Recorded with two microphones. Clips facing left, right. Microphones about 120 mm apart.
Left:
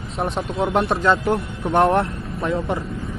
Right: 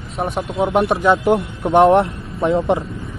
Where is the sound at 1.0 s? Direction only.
25° right (ahead or behind).